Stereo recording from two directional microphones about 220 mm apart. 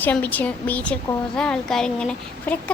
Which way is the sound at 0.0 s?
10° left (ahead or behind).